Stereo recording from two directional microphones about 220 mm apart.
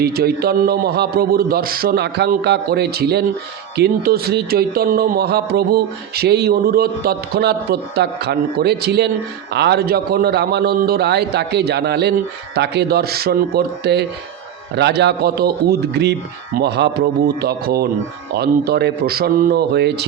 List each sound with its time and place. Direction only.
0.0 s speech: 45° right (ahead or behind)